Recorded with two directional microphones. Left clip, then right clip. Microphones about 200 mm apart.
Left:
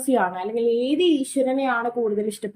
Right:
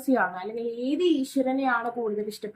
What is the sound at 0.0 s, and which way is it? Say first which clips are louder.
A woman's voice: left 4 dB; 35° left (ahead or behind).